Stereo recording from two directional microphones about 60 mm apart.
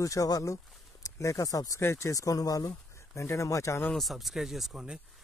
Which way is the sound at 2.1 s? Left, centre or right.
Left.